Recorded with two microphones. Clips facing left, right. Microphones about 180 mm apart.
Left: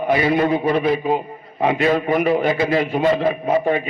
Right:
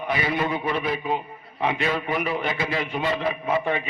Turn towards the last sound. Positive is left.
turn(degrees=40)  # may be behind; listen again after turning